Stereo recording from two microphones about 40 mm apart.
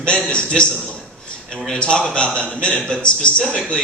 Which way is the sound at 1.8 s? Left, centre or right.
Left.